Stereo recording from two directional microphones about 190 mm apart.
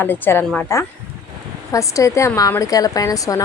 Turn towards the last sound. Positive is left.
turn(degrees=20)  # may be behind; listen again after turning